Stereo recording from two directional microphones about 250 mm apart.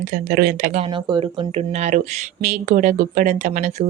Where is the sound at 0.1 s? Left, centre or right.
Right.